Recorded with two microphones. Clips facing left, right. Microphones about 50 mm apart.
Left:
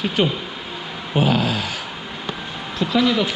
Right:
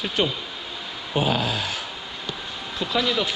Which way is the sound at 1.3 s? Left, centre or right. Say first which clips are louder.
Left 4 dB; left.